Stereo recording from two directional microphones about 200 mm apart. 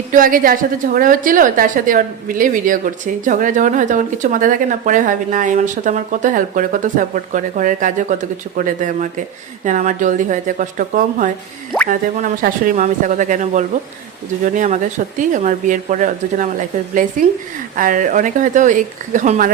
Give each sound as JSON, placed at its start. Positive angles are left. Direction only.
{"t": 0.1, "sound": "a woman's voice", "side_deg": -45}